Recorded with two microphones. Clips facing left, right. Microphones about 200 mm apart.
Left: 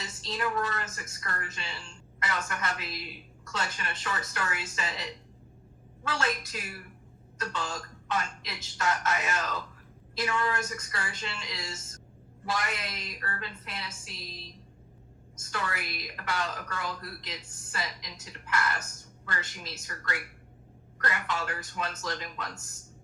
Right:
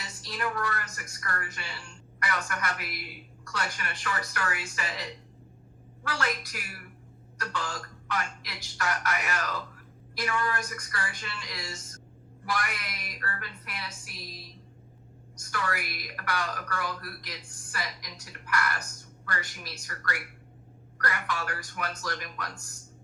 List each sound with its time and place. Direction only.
0.0 s a woman's voice: 25° left (ahead or behind)